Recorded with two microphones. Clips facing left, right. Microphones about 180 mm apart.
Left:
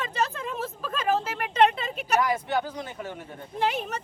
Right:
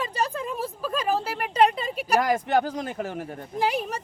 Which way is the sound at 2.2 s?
45° right (ahead or behind).